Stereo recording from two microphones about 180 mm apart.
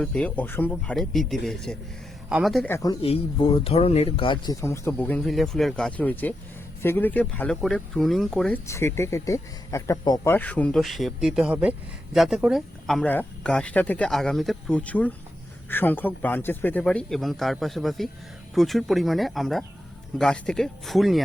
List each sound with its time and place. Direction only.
0.0 s speech: 5° left (ahead or behind)
2.6 s speech: 15° left (ahead or behind)
3.0 s speech: 30° left (ahead or behind)
4.6 s speech: 15° left (ahead or behind)
10.3 s speech: 10° left (ahead or behind)